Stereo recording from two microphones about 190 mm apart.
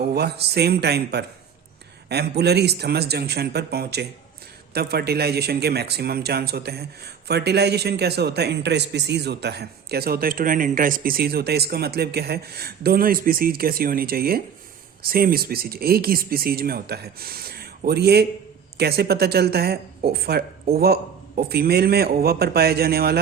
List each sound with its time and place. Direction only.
0.1 s speech: 60° right (ahead or behind)